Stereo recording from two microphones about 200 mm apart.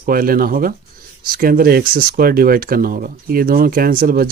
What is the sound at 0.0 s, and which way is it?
Speech, 45° right (ahead or behind).